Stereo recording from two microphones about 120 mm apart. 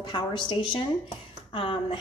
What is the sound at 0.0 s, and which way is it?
A woman's voice, 40° left (ahead or behind).